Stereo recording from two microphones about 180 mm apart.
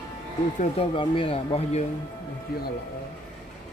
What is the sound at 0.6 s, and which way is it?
Speech, 30° left (ahead or behind).